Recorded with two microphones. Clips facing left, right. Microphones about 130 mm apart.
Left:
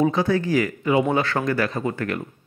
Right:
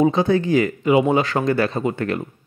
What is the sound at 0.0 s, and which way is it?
A man's voice, 20° right (ahead or behind).